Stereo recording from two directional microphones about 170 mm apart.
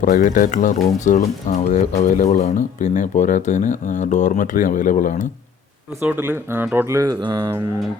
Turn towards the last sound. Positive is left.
turn(degrees=-25)  # may be behind; listen again after turning